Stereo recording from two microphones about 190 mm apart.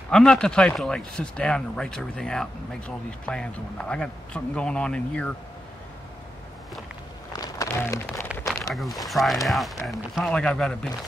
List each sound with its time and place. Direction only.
0.1 s speech: 5° left (ahead or behind)
7.3 s a sound: 20° left (ahead or behind)
8.7 s speech: centre (ahead or behind)